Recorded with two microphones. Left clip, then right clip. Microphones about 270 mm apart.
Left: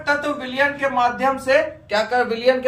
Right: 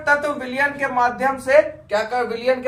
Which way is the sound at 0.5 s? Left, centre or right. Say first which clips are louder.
Left 1 dB; centre.